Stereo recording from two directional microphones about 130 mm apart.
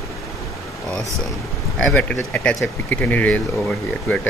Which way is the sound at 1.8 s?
10° left (ahead or behind).